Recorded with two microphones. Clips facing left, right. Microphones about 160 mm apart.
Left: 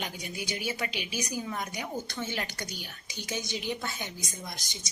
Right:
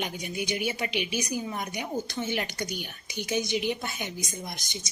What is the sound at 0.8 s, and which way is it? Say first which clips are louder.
Speech: right 6 dB; 35° left (ahead or behind).